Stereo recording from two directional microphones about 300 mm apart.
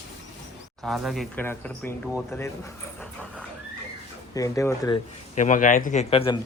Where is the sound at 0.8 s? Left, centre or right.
Centre.